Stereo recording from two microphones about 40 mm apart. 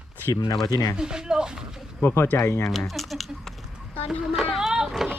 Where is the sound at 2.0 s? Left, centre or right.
Left.